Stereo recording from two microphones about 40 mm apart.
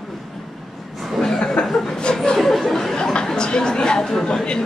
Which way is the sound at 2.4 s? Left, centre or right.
Centre.